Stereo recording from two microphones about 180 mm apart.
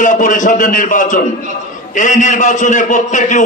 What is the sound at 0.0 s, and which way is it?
A man's voice, 45° left (ahead or behind).